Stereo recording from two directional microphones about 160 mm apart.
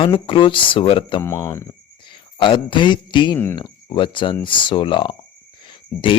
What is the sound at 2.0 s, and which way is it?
Speech, 30° left (ahead or behind).